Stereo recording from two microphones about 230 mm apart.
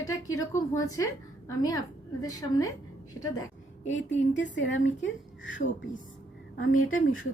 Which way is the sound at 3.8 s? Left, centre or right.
Left.